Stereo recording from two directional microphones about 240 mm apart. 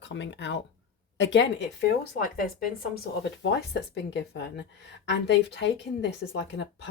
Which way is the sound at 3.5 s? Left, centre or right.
Left.